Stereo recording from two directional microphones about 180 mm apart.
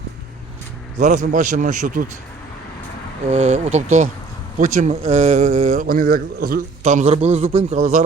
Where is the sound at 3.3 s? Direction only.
35° right (ahead or behind).